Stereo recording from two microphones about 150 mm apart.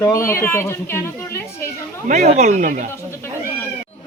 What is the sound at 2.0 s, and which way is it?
Speech, 55° right (ahead or behind).